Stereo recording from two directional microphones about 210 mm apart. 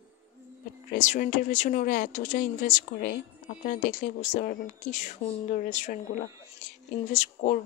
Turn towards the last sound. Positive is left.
turn(degrees=35)  # may be behind; listen again after turning